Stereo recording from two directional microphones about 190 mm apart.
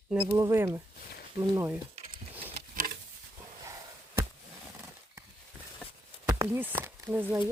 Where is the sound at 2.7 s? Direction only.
50° right (ahead or behind).